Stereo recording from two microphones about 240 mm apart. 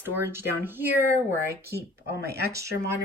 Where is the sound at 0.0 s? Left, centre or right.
Centre.